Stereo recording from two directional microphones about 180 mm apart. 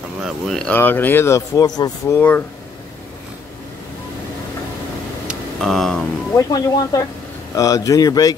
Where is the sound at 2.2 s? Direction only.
10° left (ahead or behind).